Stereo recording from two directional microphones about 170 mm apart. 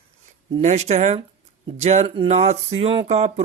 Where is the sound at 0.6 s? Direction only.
40° right (ahead or behind).